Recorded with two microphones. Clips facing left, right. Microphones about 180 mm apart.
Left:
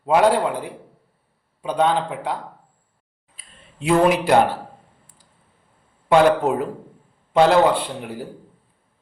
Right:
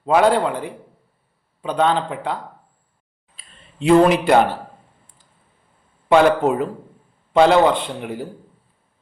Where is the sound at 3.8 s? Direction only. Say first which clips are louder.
Right 4 dB; 5° left (ahead or behind).